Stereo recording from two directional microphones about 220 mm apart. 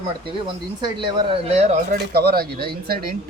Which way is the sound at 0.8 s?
20° right (ahead or behind).